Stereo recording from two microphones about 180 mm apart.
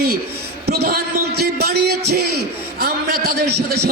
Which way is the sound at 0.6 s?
60° right (ahead or behind).